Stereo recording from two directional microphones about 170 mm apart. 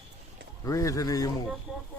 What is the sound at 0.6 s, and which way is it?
Speech, 20° left (ahead or behind).